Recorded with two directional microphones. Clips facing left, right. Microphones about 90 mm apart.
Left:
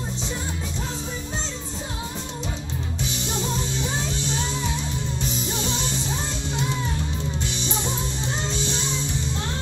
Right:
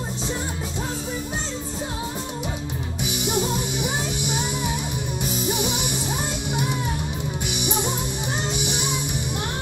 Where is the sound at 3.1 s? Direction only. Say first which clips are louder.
Right 6 dB; 15° right (ahead or behind).